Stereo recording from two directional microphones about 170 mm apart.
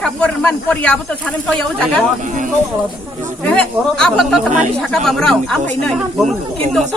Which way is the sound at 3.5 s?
5° left (ahead or behind).